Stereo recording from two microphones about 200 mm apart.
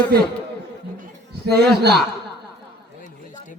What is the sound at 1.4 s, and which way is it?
Speech, 55° right (ahead or behind).